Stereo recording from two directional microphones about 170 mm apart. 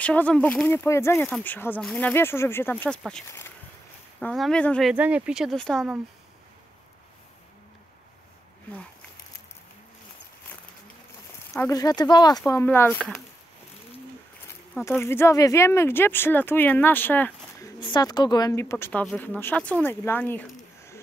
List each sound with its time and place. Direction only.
0.0 s speech: 10° left (ahead or behind)
2.7 s speech: 5° left (ahead or behind)
4.9 s speech: 10° right (ahead or behind)
11.5 s speech: 20° left (ahead or behind); by 13.2 s 5° left (ahead or behind)
14.9 s speech: 15° left (ahead or behind)